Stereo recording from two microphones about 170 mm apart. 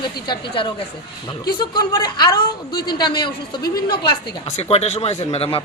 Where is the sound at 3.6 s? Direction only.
65° left (ahead or behind).